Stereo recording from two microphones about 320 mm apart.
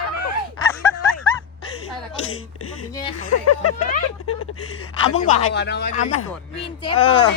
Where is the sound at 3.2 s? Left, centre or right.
Left.